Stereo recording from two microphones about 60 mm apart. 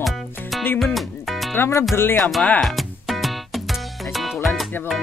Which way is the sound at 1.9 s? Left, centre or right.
Left.